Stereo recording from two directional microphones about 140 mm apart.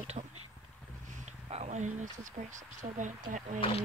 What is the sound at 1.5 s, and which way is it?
Speech, 55° right (ahead or behind).